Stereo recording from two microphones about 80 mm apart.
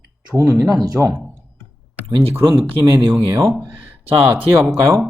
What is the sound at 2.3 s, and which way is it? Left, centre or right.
Speech, right.